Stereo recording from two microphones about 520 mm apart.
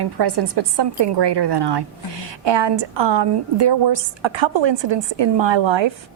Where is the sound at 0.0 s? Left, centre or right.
Right.